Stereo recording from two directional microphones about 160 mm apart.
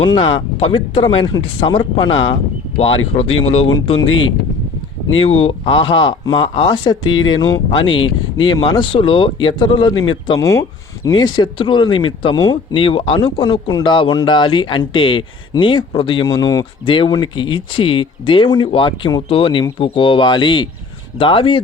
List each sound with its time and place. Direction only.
0.2 s speech: 35° left (ahead or behind)
5.1 s speech: 35° left (ahead or behind)